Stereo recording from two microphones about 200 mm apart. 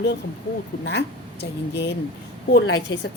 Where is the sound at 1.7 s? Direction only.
55° left (ahead or behind).